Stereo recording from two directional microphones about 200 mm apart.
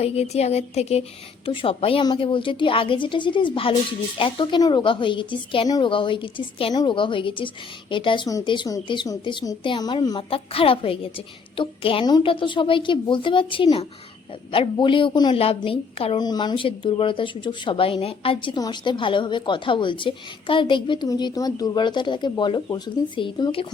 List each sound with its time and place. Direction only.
0.0 s a woman's voice: 30° left (ahead or behind)